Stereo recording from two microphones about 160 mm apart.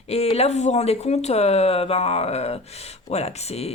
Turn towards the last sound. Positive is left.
turn(degrees=40)  # may be behind; listen again after turning